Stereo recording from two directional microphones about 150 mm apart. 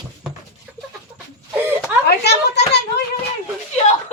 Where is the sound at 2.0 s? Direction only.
90° left.